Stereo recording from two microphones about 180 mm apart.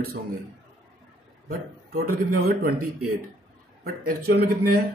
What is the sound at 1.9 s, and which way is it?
A man's voice, 60° right (ahead or behind).